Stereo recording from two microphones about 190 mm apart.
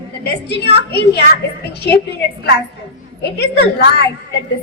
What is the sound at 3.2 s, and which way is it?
Speech, 60° left (ahead or behind).